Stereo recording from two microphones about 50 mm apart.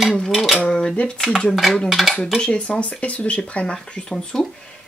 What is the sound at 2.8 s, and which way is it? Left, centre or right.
Speech, left.